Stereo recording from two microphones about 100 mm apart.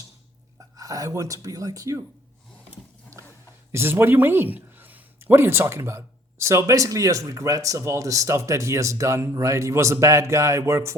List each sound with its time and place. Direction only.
0.8 s speech: 35° right (ahead or behind)
3.7 s speech: 25° right (ahead or behind)